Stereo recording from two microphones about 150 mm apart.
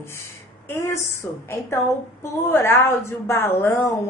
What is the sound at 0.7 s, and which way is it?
Speech, 20° left (ahead or behind).